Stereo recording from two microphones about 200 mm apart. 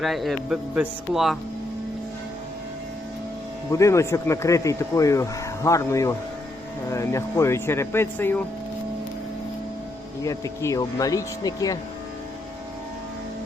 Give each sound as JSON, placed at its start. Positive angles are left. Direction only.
{"t": 0.0, "sound": "speech", "side_deg": 0}
{"t": 3.7, "sound": "speech", "side_deg": 15}
{"t": 10.2, "sound": "speech", "side_deg": 15}